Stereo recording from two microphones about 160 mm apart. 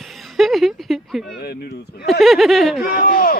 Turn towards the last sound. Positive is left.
turn(degrees=65)  # may be behind; listen again after turning